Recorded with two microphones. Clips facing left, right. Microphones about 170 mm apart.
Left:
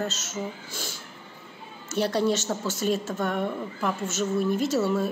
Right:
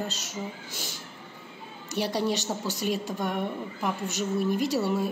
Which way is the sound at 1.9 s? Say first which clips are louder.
Left 3 dB; 15° right (ahead or behind).